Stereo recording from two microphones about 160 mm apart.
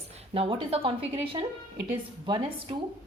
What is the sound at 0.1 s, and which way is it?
Speech, 40° right (ahead or behind).